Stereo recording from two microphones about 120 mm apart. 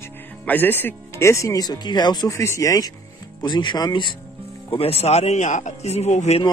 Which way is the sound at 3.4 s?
40° left (ahead or behind).